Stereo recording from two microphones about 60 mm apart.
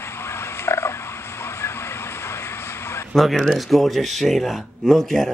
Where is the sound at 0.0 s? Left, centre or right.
Left.